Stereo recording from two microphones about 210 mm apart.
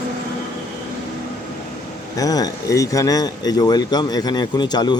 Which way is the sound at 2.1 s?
15° left (ahead or behind).